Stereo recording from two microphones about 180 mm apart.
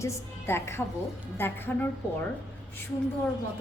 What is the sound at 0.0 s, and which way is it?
A woman's voice, 15° left (ahead or behind).